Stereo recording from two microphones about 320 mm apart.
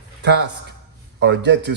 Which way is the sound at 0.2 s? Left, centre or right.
Right.